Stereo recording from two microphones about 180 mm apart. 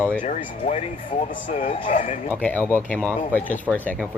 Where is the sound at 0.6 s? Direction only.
45° left (ahead or behind).